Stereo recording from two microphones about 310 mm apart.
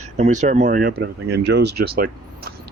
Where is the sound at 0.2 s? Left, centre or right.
Right.